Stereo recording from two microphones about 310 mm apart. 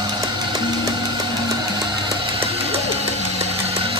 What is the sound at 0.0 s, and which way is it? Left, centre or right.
Music, centre.